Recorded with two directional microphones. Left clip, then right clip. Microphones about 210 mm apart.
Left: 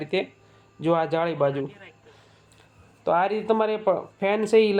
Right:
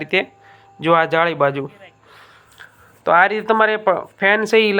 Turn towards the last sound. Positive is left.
turn(degrees=-10)  # may be behind; listen again after turning